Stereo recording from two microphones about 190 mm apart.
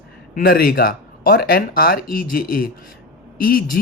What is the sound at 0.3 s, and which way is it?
Speech, 50° left (ahead or behind).